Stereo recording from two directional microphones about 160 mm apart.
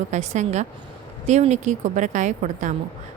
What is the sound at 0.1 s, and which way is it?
A woman's voice, 45° right (ahead or behind).